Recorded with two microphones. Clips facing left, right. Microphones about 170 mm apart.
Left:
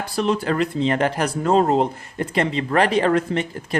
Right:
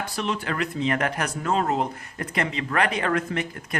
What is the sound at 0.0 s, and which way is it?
Speech, 35° left (ahead or behind).